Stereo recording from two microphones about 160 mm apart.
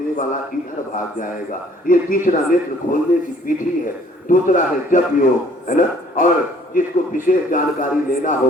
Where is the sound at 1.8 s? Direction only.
60° left (ahead or behind).